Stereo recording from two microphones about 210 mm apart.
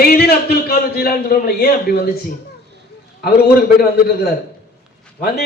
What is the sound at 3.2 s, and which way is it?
A man's voice, 45° left (ahead or behind).